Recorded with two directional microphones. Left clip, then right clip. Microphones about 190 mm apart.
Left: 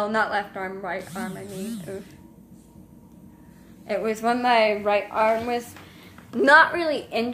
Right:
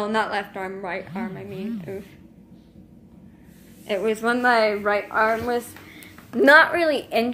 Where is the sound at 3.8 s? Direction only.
Centre (ahead or behind).